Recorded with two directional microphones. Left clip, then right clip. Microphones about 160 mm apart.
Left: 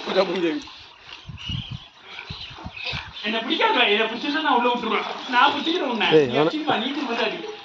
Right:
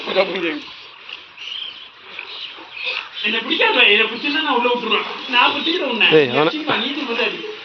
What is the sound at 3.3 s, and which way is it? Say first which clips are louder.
Speech: right 4 dB; 25° left (ahead or behind).